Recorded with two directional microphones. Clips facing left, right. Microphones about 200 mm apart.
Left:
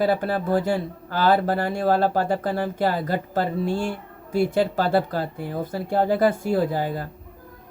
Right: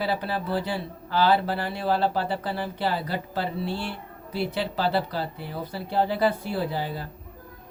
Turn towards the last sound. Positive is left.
turn(degrees=45)  # may be behind; listen again after turning